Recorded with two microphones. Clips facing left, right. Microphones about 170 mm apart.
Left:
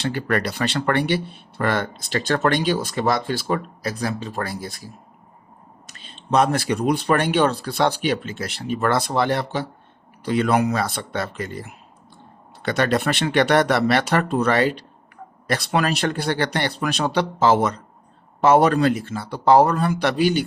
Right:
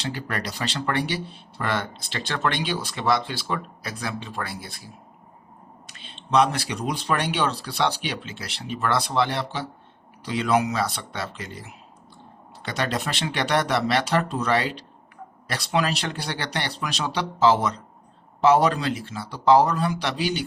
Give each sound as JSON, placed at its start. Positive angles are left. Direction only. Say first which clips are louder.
{"t": 0.0, "sound": "speech", "louder": "left 7 dB", "side_deg": 55}
{"t": 5.9, "sound": "speech", "louder": "left 2 dB", "side_deg": 40}